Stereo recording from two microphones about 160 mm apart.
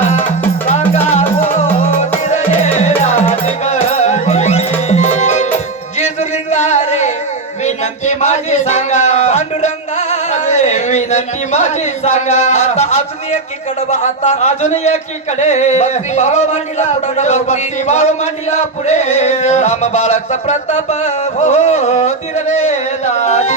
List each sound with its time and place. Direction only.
1.2 s music: 10° left (ahead or behind)
1.8 s music: 45° left (ahead or behind)
6.5 s music: 45° left (ahead or behind)
14.0 s a sound: 45° left (ahead or behind)